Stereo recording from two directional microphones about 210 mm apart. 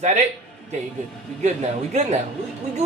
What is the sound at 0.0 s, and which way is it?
A man's voice, 35° right (ahead or behind).